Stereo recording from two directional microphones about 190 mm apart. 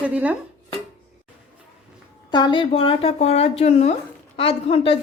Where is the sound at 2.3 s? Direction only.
25° left (ahead or behind).